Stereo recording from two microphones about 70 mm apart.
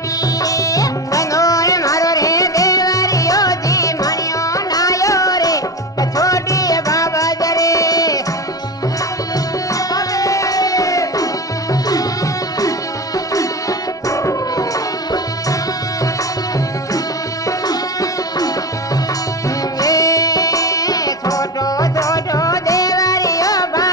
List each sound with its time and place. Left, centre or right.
0.4 s music: left
9.9 s music: left
19.8 s music: left